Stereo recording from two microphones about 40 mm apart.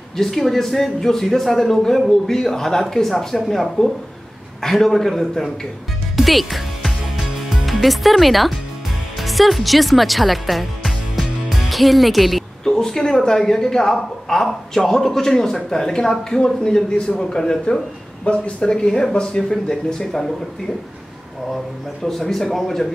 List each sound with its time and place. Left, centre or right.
0.2 s speech: centre
6.1 s music: centre
7.4 s speech: centre
12.6 s speech: centre
22.0 s speech: centre